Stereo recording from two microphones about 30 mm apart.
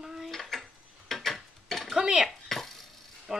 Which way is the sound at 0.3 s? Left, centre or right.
Centre.